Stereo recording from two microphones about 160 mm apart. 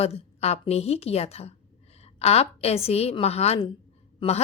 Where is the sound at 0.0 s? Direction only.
40° left (ahead or behind).